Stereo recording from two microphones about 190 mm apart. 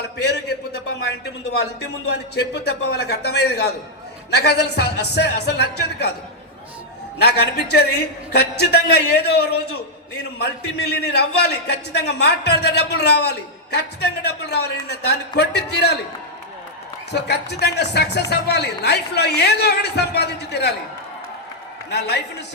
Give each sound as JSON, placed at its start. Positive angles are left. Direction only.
{"t": 0.0, "sound": "a sound", "side_deg": 60}
{"t": 1.8, "sound": "a man's voice", "side_deg": 60}
{"t": 7.2, "sound": "a man's voice", "side_deg": 60}
{"t": 17.1, "sound": "a man's voice", "side_deg": 60}
{"t": 21.8, "sound": "a man's voice", "side_deg": 60}